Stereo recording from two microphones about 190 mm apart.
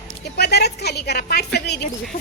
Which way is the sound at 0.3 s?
60° left (ahead or behind).